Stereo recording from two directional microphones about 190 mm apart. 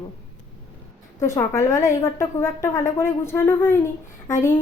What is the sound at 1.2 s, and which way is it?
A woman's voice, 15° left (ahead or behind).